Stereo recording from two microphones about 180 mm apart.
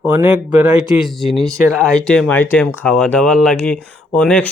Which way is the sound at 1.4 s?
15° right (ahead or behind).